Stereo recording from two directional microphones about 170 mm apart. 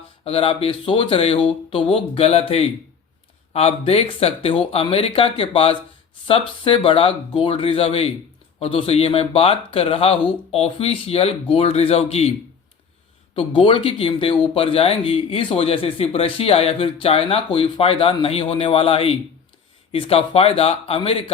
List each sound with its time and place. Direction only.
0.3 s speech: 35° left (ahead or behind)
13.3 s speech: 30° left (ahead or behind)